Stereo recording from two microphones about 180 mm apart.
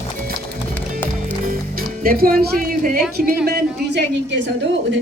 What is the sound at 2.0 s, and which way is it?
Speech, 55° right (ahead or behind).